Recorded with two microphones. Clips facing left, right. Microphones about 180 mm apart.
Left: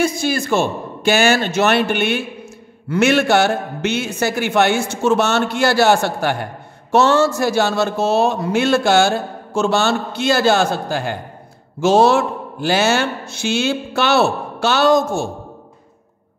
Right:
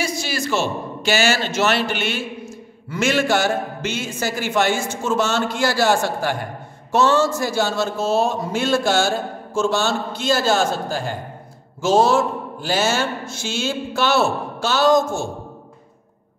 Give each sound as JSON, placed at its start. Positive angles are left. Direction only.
{"t": 0.0, "sound": "a man's voice", "side_deg": 55}